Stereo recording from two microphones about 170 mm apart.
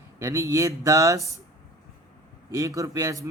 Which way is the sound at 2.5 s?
20° right (ahead or behind).